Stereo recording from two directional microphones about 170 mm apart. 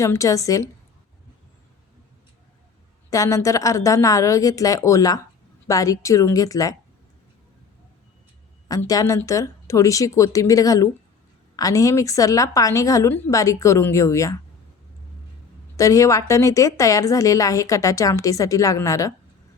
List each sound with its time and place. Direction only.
0.0 s a woman's voice: 20° left (ahead or behind)
3.1 s a woman's voice: 20° left (ahead or behind)
8.6 s a woman's voice: 20° left (ahead or behind)
15.7 s a woman's voice: 20° left (ahead or behind)